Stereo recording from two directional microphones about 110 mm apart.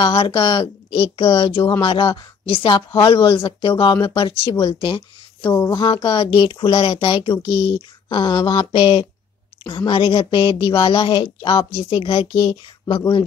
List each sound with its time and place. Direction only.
0.0 s speech: 55° left (ahead or behind); by 5.9 s 40° left (ahead or behind)
6.0 s speech: 55° left (ahead or behind)
7.4 s speech: 30° left (ahead or behind)
8.7 s speech: 55° left (ahead or behind)
11.9 s speech: 60° left (ahead or behind)
12.3 s speech: 40° left (ahead or behind)